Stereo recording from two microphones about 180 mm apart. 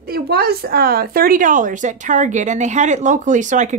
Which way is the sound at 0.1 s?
60° right (ahead or behind).